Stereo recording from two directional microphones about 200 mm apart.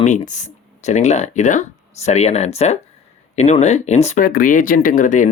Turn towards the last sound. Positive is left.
turn(degrees=40)  # may be behind; listen again after turning